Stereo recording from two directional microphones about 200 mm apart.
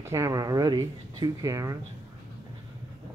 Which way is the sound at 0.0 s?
15° right (ahead or behind).